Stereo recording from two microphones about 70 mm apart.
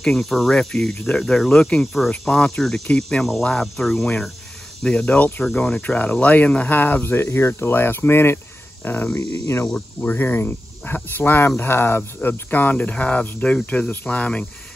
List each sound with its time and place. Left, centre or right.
0.0 s speech: centre
4.8 s speech: centre
5.4 s speech: centre
5.8 s speech: left
9.8 s speech: left